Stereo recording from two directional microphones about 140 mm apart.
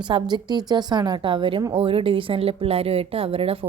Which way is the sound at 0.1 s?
30° right (ahead or behind).